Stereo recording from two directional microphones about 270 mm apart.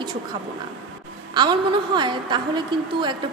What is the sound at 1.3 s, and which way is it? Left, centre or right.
A woman's voice, centre.